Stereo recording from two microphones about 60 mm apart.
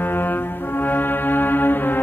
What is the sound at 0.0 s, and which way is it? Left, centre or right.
Music, left.